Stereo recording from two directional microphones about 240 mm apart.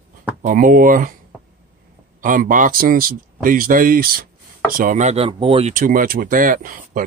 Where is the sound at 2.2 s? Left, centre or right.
Right.